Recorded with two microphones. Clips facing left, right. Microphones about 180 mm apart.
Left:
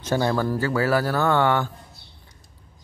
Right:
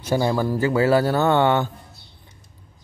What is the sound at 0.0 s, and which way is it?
Speech, 10° right (ahead or behind).